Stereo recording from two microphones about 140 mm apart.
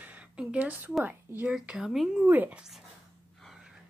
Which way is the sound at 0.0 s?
10° right (ahead or behind).